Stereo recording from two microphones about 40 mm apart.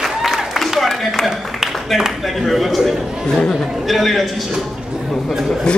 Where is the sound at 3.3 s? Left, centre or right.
Centre.